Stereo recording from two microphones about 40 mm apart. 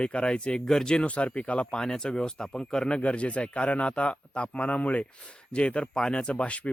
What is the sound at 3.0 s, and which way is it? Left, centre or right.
Speech, left.